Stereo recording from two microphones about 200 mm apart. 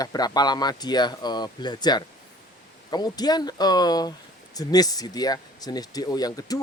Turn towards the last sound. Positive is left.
turn(degrees=20)  # may be behind; listen again after turning